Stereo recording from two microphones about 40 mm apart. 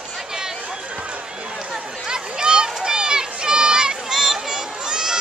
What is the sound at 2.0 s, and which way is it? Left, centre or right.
Run, right.